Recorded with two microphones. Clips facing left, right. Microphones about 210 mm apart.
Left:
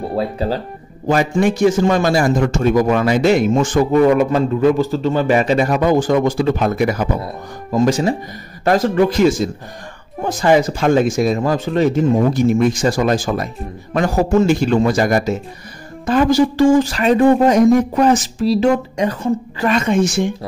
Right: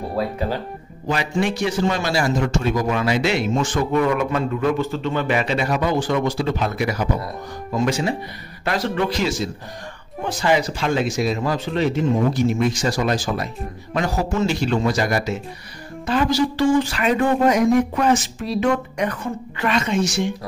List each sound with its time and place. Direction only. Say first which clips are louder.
0.1 s speech: left 3 dB; 30° left (ahead or behind)
1.0 s a man's voice: left 7 dB; 45° left (ahead or behind); by 19.1 s 30° left (ahead or behind)
19.6 s a man's voice: left 4 dB; 50° left (ahead or behind)